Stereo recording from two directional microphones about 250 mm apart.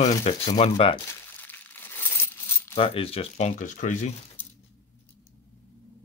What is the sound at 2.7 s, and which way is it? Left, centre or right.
Speech, left.